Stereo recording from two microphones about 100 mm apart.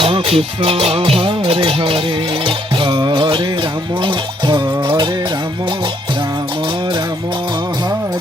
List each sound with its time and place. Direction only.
0.0 s speech: 75° right (ahead or behind)
2.8 s music: 50° right (ahead or behind)